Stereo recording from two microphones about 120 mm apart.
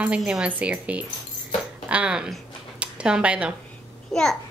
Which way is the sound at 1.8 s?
10° right (ahead or behind).